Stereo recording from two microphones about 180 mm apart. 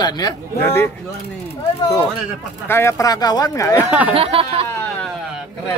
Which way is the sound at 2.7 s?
15° left (ahead or behind).